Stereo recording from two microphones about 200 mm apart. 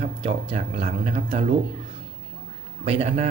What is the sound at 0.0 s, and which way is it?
A man's voice, 30° right (ahead or behind).